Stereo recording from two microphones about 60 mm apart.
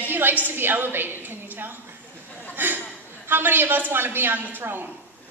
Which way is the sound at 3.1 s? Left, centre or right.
Right.